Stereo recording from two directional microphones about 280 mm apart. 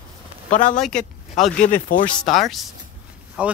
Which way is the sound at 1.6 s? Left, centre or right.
Left.